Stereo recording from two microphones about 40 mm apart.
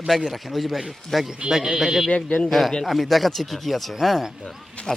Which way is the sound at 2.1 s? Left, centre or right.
Left.